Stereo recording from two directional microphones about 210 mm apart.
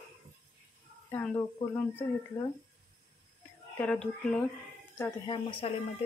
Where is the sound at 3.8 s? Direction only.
5° left (ahead or behind).